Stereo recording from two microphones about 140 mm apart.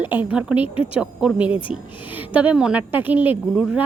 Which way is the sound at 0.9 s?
5° right (ahead or behind).